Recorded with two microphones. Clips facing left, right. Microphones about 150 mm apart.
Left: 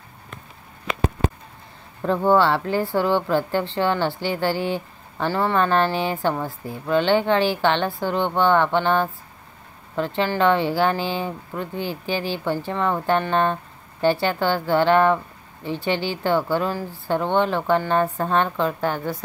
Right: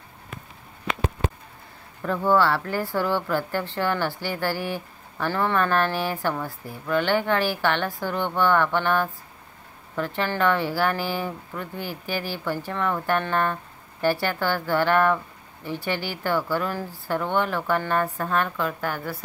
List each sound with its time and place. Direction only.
2.0 s speech: 30° left (ahead or behind)